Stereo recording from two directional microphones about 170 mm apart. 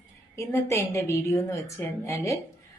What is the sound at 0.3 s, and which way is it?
Speech, 15° left (ahead or behind).